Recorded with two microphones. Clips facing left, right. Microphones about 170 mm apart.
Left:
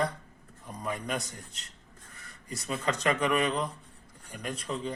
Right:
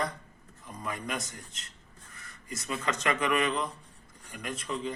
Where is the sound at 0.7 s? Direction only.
35° left (ahead or behind).